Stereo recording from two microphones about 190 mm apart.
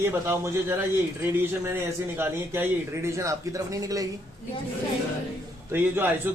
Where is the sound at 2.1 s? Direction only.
10° right (ahead or behind).